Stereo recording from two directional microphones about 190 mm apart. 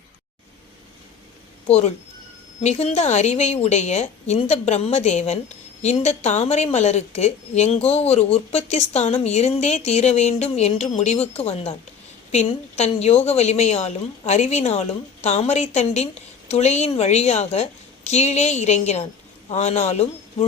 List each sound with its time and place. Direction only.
1.6 s a woman's voice: 35° left (ahead or behind)